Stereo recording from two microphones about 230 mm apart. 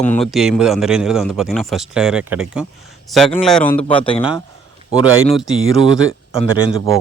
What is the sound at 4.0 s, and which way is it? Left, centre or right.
Speech, left.